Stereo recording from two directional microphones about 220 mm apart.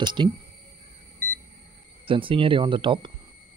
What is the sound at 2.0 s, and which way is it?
Speech, 25° right (ahead or behind).